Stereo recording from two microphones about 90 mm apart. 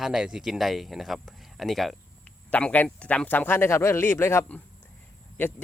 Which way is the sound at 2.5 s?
15° left (ahead or behind).